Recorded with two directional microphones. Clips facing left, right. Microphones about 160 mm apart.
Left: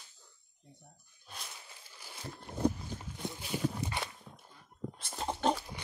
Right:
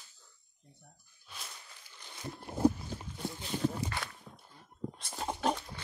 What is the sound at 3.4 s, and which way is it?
Walk, 15° left (ahead or behind).